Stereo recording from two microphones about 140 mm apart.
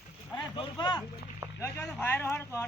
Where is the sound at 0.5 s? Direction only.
35° left (ahead or behind).